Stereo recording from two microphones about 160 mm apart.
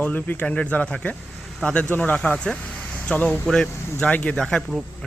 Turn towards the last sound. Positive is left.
turn(degrees=5)  # may be behind; listen again after turning